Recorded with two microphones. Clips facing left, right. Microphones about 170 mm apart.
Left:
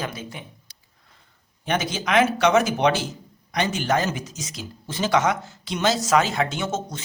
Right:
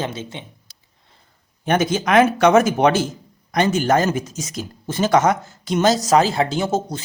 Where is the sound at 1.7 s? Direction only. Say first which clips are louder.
Right 6 dB; 50° right (ahead or behind); by 7.0 s 35° right (ahead or behind).